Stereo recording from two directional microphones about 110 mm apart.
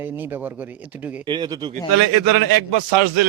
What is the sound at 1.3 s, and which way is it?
Speech, 40° right (ahead or behind).